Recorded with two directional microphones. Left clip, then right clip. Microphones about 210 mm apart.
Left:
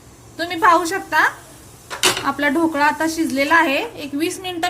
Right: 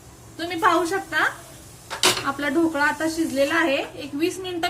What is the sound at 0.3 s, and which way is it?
A woman's voice, 35° left (ahead or behind).